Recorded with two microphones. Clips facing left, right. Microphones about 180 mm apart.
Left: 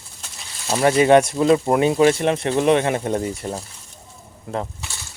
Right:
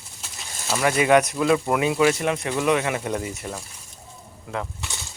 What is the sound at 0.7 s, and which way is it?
Speech, 30° left (ahead or behind).